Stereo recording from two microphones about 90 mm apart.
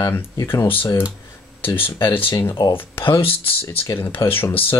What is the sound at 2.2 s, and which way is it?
Speech, 80° left.